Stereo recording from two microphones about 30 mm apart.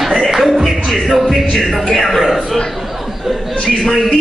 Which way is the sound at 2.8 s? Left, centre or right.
Centre.